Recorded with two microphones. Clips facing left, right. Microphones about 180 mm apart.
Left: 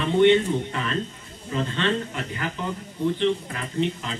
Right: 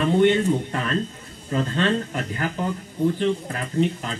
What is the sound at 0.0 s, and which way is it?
A woman's voice, 45° right (ahead or behind).